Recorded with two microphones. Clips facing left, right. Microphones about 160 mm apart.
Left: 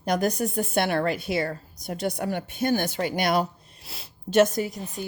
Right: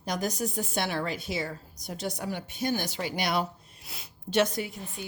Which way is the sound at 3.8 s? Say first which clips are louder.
Left 5 dB; 30° left (ahead or behind).